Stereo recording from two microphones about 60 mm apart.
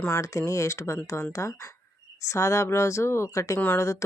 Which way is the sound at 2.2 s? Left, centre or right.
Left.